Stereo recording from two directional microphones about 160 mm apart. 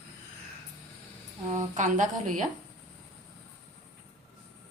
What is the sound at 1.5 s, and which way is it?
Speech, 50° right (ahead or behind).